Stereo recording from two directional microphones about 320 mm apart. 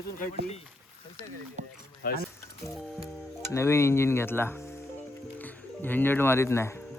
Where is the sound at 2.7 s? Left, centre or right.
Centre.